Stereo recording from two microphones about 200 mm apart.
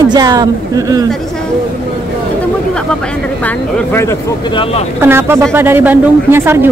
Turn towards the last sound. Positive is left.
turn(degrees=-10)  # may be behind; listen again after turning